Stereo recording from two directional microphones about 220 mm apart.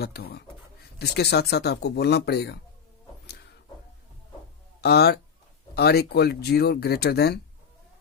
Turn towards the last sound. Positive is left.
turn(degrees=45)  # may be behind; listen again after turning